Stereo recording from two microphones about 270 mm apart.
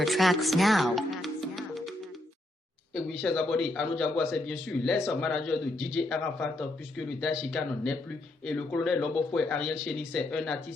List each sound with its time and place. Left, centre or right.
0.0 s music: centre
2.9 s a man's voice: centre